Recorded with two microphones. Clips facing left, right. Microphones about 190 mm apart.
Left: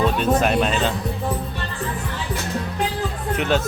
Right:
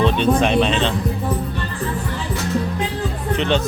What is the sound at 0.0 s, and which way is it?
Speech, 5° left (ahead or behind).